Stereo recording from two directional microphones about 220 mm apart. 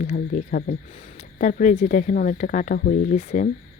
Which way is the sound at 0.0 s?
35° left (ahead or behind).